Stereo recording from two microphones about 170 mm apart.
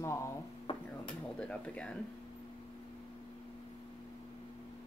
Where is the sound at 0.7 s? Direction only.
30° left (ahead or behind).